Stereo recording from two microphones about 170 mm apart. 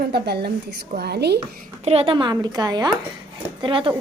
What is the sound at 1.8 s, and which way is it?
Speech, 35° right (ahead or behind).